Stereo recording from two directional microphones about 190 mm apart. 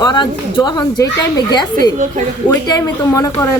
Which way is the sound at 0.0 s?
25° left (ahead or behind).